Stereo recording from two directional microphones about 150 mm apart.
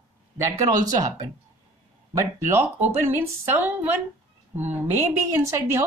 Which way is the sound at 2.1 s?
15° right (ahead or behind).